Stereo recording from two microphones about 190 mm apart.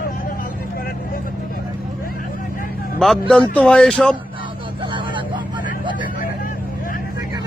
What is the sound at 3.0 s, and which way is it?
Speech, centre (ahead or behind).